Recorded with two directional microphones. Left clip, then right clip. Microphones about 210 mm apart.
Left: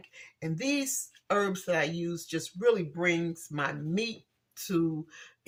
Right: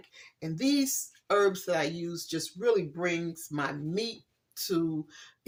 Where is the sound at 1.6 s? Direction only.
25° right (ahead or behind).